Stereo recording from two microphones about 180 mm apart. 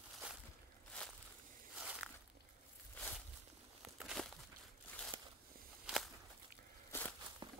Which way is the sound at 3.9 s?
5° right (ahead or behind).